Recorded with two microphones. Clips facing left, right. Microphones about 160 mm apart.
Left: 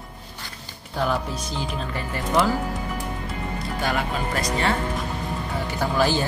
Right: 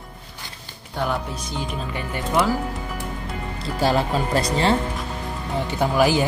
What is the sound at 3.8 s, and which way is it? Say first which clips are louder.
Speech: right 6 dB; 30° right (ahead or behind).